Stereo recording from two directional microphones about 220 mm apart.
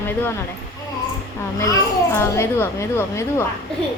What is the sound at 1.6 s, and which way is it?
A woman's voice, 10° left (ahead or behind).